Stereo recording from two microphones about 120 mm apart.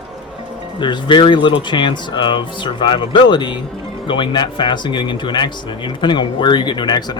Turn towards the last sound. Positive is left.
turn(degrees=35)  # may be behind; listen again after turning